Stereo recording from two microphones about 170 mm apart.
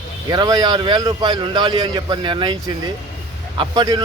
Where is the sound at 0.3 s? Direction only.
25° right (ahead or behind).